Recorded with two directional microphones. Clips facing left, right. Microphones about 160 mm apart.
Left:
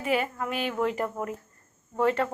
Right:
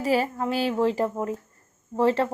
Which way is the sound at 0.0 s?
35° right (ahead or behind).